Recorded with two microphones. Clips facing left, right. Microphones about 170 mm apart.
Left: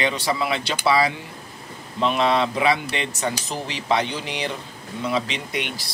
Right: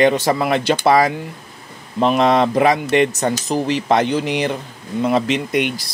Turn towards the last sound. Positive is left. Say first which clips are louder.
# right 9 dB
turn(degrees=-50)  # may be behind; listen again after turning